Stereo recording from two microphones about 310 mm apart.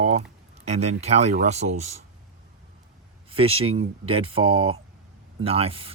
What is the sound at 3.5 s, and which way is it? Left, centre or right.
Speech, right.